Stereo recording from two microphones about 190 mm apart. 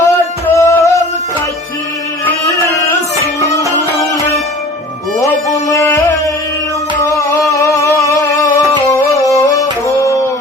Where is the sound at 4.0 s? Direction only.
15° left (ahead or behind).